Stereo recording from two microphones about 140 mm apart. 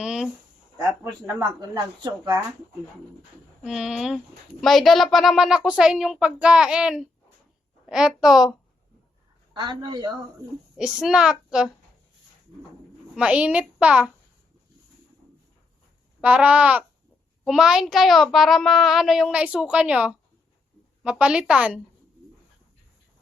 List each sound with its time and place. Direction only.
0.0 s a sound: 5° right (ahead or behind)
3.6 s a child's voice: 5° right (ahead or behind)
9.5 s a man's voice: 35° right (ahead or behind)
10.8 s a child's voice: 5° right (ahead or behind)
13.1 s a child's voice: 10° right (ahead or behind)
16.2 s a child's voice: 10° right (ahead or behind)